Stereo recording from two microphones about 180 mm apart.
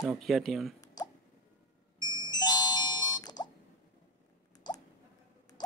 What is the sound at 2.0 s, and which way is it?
Music, 25° left (ahead or behind).